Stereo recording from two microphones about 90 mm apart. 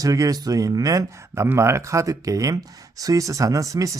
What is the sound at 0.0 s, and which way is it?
Speech, 40° right (ahead or behind).